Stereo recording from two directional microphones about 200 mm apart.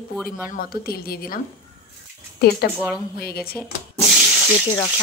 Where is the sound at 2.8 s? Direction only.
5° right (ahead or behind).